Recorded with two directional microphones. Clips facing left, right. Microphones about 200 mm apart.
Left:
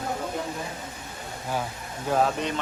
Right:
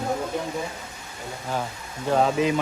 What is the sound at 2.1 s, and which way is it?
Speech, centre (ahead or behind).